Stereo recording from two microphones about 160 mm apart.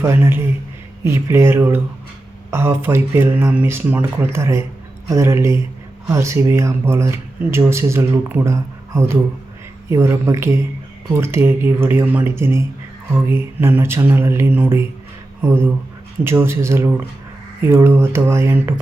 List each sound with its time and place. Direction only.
0.0 s speech: 15° right (ahead or behind)